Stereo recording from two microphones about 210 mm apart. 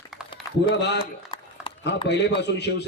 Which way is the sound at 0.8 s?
55° left (ahead or behind).